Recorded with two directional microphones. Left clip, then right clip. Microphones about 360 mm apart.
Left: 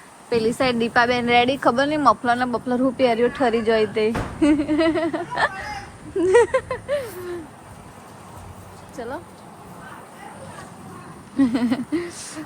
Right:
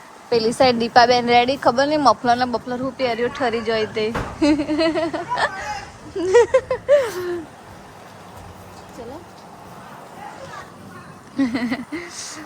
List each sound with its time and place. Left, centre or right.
0.3 s a woman's voice: centre
6.8 s speech: right
11.3 s a woman's voice: centre